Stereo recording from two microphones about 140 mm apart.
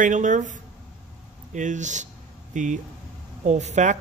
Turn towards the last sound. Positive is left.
turn(degrees=-55)  # may be behind; listen again after turning